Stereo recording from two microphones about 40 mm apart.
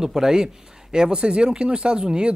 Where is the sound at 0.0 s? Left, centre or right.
Centre.